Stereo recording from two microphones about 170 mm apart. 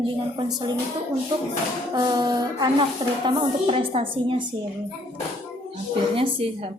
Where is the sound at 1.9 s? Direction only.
25° right (ahead or behind).